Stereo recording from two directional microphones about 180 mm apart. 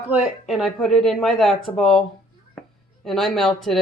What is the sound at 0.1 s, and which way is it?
Speech, centre (ahead or behind).